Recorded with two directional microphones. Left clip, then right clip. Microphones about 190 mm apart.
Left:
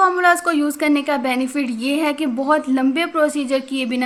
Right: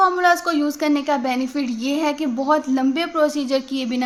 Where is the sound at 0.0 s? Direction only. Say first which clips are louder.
Left 2 dB; 15° left (ahead or behind).